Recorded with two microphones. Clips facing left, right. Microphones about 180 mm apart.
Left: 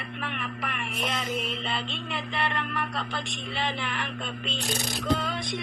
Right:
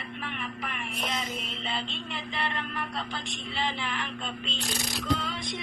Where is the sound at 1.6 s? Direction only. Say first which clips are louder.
Left 2 dB; 60° left (ahead or behind).